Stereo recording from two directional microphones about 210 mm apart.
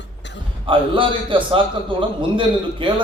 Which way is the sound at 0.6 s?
25° right (ahead or behind).